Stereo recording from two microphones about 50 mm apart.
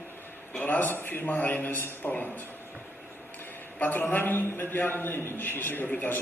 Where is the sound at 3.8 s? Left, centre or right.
Left.